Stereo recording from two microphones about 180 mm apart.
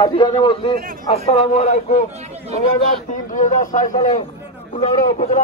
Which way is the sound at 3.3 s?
45° left (ahead or behind).